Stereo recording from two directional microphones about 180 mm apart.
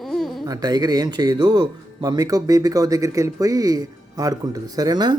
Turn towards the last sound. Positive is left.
turn(degrees=-25)  # may be behind; listen again after turning